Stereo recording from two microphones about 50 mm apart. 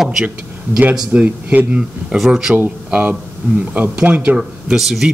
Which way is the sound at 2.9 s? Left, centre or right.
Right.